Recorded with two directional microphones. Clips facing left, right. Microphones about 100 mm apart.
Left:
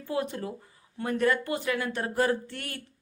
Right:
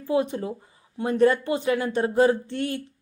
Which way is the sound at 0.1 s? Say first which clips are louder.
Right 7 dB; 20° right (ahead or behind).